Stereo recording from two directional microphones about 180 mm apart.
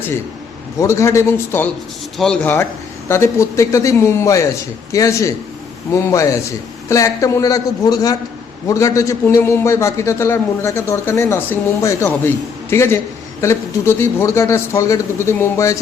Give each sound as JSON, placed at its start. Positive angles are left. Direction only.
{"t": 0.8, "sound": "a man's voice", "side_deg": 15}